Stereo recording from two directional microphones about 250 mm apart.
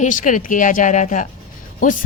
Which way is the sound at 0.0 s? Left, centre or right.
Left.